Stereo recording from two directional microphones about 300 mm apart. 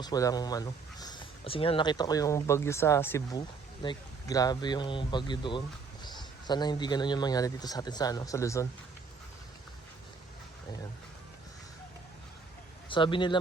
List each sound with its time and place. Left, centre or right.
0.0 s a man's voice: centre
12.9 s speech: centre